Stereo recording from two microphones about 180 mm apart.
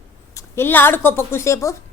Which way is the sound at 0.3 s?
15° left (ahead or behind).